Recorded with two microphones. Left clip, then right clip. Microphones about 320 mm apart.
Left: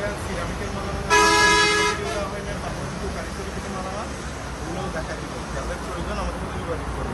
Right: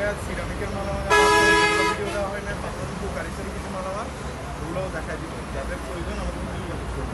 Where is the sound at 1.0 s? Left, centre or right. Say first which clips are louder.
Even; right.